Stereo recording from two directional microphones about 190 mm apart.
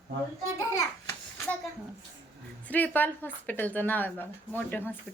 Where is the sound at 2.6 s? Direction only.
10° left (ahead or behind).